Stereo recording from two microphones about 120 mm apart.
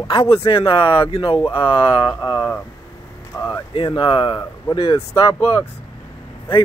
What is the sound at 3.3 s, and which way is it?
Speech, 25° left (ahead or behind).